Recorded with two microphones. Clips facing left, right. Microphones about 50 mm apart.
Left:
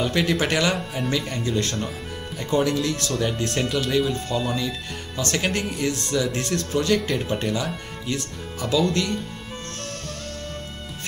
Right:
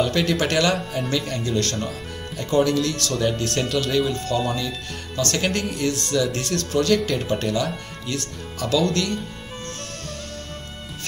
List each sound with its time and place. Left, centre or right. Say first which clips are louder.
0.0 s speech: right 1 dB; centre
3.1 s speech: right 2 dB; centre
7.0 s speech: right 1 dB; centre